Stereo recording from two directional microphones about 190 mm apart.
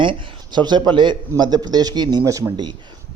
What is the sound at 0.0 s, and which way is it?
A man's voice, 25° right (ahead or behind).